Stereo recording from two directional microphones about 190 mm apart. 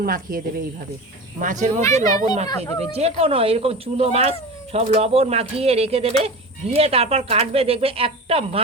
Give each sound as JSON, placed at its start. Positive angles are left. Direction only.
{"t": 0.0, "sound": "speech", "side_deg": -50}
{"t": 1.4, "sound": "speech", "side_deg": -40}
{"t": 2.0, "sound": "speech", "side_deg": 20}
{"t": 2.9, "sound": "speech", "side_deg": -30}